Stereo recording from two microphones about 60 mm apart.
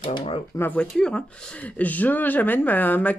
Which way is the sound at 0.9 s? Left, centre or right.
Centre.